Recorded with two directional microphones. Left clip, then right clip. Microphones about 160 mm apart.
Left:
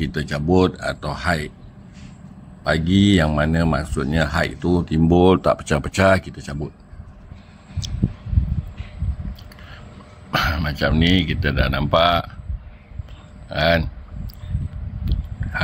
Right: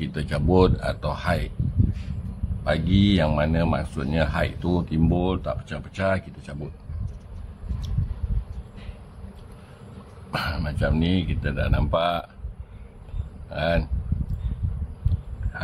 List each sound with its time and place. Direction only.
0.0 s speech: 15° left (ahead or behind)
1.0 s speech: 20° left (ahead or behind)
2.6 s speech: 35° left (ahead or behind)
5.1 s speech: 55° left (ahead or behind)
6.1 s speech: 30° left (ahead or behind)
10.3 s speech: 20° left (ahead or behind)
13.5 s speech: 25° left (ahead or behind)